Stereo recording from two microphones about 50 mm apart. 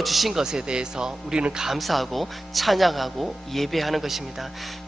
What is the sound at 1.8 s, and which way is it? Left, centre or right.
Speech, centre.